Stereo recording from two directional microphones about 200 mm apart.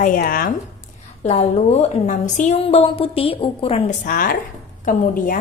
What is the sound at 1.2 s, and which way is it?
A woman's voice, 35° left (ahead or behind).